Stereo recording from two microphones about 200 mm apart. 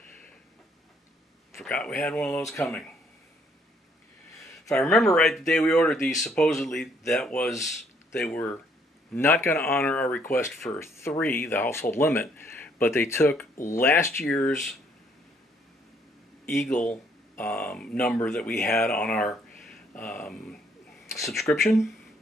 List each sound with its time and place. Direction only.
1.6 s speech: 5° left (ahead or behind)
4.7 s speech: 5° left (ahead or behind)
16.6 s speech: 40° left (ahead or behind)
16.9 s speech: 5° left (ahead or behind)
19.6 s a sound: 5° left (ahead or behind)
21.3 s speech: centre (ahead or behind)